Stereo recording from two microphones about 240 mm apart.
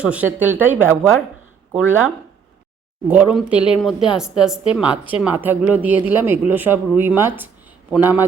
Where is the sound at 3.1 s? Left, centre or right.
Centre.